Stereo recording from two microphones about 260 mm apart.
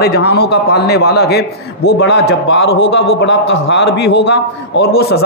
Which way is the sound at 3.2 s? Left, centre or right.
Left.